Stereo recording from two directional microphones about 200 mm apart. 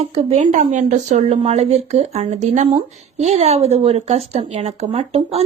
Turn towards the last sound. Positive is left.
turn(degrees=-30)  # may be behind; listen again after turning